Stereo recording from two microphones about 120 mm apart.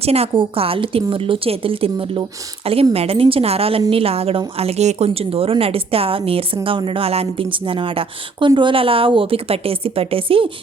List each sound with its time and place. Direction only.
0.0 s a woman's voice: 55° right (ahead or behind)